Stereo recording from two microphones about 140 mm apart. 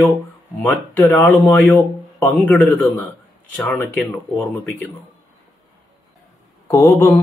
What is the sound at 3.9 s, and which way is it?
Speech, 10° left (ahead or behind).